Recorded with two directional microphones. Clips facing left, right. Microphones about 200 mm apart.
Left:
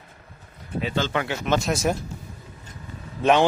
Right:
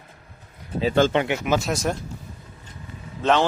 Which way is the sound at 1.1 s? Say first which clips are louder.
Right 4 dB; 20° right (ahead or behind).